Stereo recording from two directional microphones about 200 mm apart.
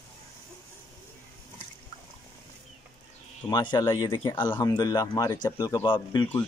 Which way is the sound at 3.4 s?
20° left (ahead or behind).